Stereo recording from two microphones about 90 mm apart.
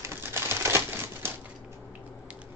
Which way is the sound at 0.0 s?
30° right (ahead or behind).